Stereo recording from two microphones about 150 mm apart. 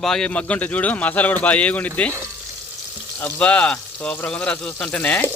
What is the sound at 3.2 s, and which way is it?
A man's voice, 10° left (ahead or behind).